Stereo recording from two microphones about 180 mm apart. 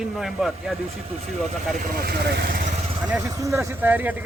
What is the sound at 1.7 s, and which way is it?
Speech, 55° right (ahead or behind).